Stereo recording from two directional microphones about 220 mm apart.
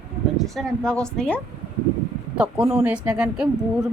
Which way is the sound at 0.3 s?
Centre (ahead or behind).